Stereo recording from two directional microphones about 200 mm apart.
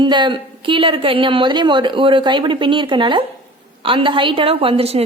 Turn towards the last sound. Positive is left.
turn(degrees=-30)  # may be behind; listen again after turning